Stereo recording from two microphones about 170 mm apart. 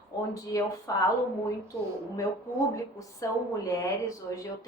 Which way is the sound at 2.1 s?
20° left (ahead or behind).